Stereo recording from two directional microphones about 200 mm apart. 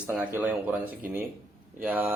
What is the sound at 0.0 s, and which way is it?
A man's voice, 10° right (ahead or behind).